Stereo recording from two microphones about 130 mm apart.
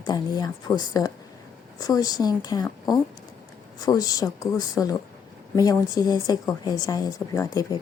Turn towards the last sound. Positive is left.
turn(degrees=30)  # may be behind; listen again after turning